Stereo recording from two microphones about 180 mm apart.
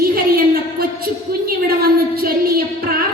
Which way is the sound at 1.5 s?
55° right (ahead or behind).